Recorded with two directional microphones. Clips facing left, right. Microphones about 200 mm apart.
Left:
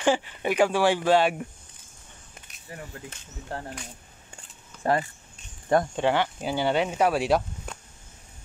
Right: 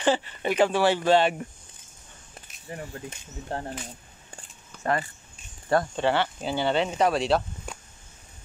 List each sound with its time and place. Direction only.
0.0 s speech: 10° left (ahead or behind)
2.7 s speech: 25° right (ahead or behind)
5.7 s speech: 15° left (ahead or behind)